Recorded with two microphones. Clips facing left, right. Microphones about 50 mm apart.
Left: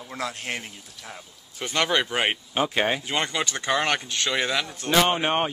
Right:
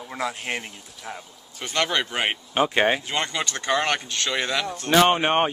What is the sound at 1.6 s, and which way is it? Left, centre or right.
Speech, centre.